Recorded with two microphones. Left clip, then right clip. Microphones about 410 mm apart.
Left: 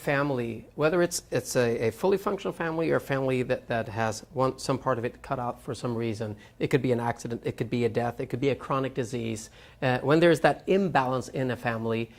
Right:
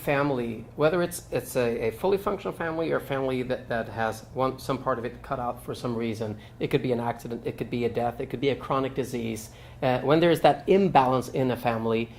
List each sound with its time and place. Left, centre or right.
0.0 s speech: left